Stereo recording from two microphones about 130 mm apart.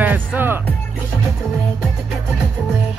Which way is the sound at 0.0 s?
15° right (ahead or behind).